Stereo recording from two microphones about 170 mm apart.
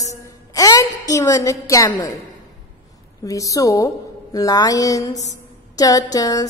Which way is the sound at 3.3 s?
20° left (ahead or behind).